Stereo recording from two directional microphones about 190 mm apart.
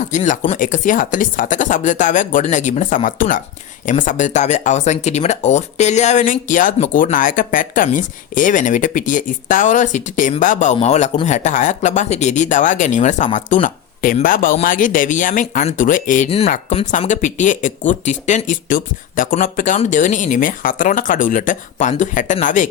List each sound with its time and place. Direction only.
0.1 s speech: 35° left (ahead or behind)